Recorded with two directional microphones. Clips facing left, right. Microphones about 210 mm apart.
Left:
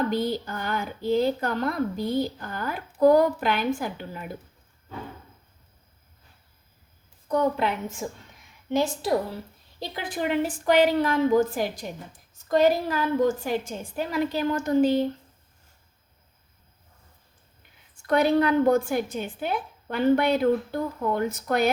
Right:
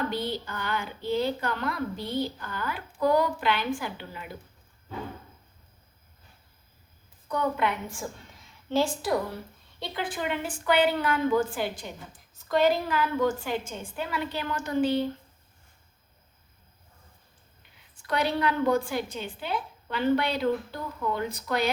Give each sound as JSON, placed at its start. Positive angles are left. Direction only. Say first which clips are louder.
{"t": 0.1, "sound": "speech", "louder": "left 5 dB", "side_deg": 45}
{"t": 7.3, "sound": "a woman's voice", "louder": "left 4 dB", "side_deg": 35}
{"t": 9.8, "sound": "a woman's voice", "louder": "left 3 dB", "side_deg": 40}
{"t": 18.0, "sound": "speech", "louder": "left 6 dB", "side_deg": 50}